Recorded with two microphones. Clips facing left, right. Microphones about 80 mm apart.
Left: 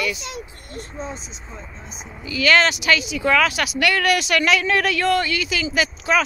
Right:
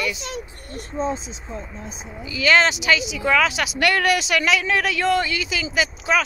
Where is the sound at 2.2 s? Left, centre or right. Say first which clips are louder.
Even; right.